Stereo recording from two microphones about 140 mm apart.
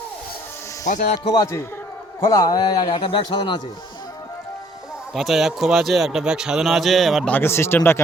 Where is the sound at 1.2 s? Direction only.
35° left (ahead or behind).